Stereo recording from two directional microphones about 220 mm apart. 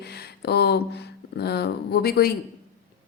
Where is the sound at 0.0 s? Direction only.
45° left (ahead or behind).